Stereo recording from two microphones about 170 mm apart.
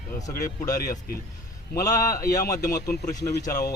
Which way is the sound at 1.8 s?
20° left (ahead or behind).